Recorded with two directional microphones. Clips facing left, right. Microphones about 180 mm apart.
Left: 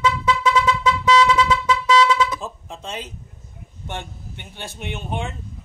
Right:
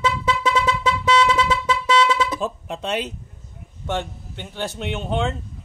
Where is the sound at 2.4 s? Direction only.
70° right (ahead or behind).